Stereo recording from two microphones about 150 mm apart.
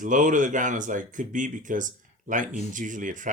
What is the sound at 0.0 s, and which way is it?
Speech, 60° right (ahead or behind).